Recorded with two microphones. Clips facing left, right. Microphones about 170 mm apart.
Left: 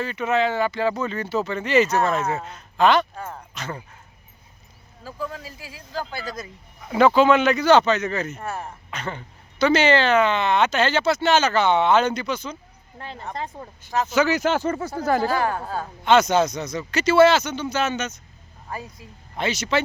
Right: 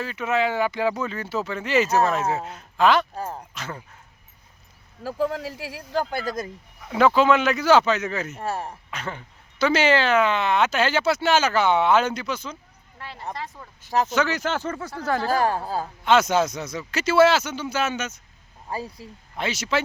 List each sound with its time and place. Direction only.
0.0 s speech: 5° right (ahead or behind)
5.0 s speech: 80° right; by 6.5 s 50° right (ahead or behind)
6.8 s speech: centre (ahead or behind)
8.4 s speech: 30° right (ahead or behind)
8.9 s speech: 5° right (ahead or behind)
13.5 s speech: 55° left (ahead or behind)
14.1 s speech: 5° left (ahead or behind)
15.3 s a woman's voice: 35° right (ahead or behind)
16.0 s speech: 5° right (ahead or behind)
18.7 s speech: 30° right (ahead or behind)
19.4 s speech: 5° right (ahead or behind)